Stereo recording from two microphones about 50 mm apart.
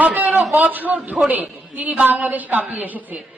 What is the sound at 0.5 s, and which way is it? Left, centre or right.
A woman's voice, right.